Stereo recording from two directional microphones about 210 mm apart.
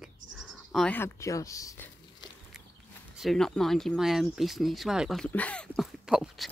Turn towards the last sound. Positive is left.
turn(degrees=0)  # may be behind; listen again after turning